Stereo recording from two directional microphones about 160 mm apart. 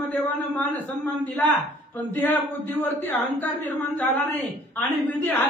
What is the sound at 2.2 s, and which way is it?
Speech, 10° left (ahead or behind).